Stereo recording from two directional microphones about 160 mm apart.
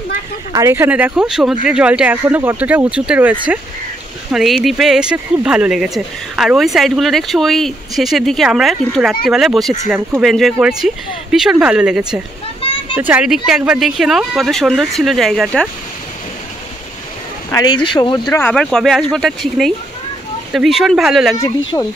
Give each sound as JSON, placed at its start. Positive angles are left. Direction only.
{"t": 0.5, "sound": "speech", "side_deg": -20}
{"t": 17.5, "sound": "speech", "side_deg": 25}
{"t": 18.3, "sound": "speech", "side_deg": 10}
{"t": 21.4, "sound": "speech", "side_deg": 25}